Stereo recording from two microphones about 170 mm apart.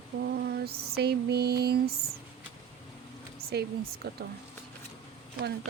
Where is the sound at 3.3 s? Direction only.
65° right (ahead or behind).